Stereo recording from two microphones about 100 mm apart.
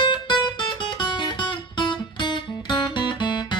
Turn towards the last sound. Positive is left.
turn(degrees=50)  # may be behind; listen again after turning